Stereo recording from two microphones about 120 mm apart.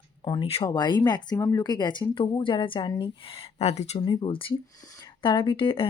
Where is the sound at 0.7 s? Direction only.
35° left (ahead or behind).